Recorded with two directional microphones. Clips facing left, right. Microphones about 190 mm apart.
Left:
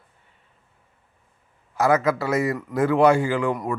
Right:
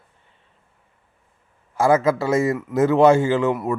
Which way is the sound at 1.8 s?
25° right (ahead or behind).